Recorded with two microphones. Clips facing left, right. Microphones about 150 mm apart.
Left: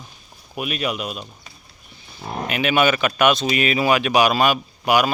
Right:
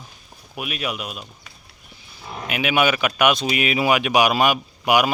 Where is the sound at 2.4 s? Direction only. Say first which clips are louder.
Left 1 dB; 10° right (ahead or behind).